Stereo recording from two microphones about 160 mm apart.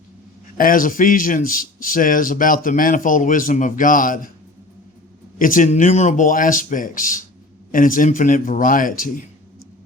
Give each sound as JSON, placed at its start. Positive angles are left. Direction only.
{"t": 0.5, "sound": "a man's voice", "side_deg": 60}
{"t": 5.4, "sound": "a man's voice", "side_deg": 55}